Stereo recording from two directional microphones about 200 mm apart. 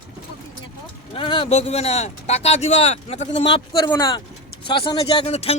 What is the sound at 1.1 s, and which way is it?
A man's voice, 25° left (ahead or behind).